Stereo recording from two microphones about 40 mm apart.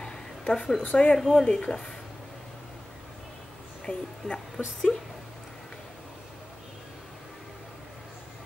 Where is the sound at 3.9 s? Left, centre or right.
Left.